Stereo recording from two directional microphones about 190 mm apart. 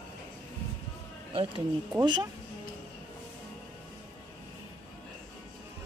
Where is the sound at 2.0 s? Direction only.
25° right (ahead or behind).